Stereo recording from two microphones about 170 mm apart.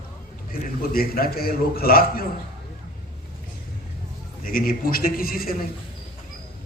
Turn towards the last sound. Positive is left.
turn(degrees=60)  # may be behind; listen again after turning